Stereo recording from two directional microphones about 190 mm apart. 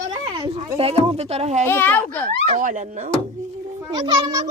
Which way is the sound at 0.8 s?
30° right (ahead or behind).